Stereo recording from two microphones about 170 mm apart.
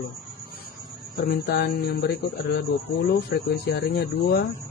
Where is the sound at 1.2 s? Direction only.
65° left (ahead or behind).